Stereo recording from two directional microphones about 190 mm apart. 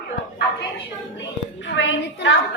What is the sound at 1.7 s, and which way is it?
Speech, 80° left.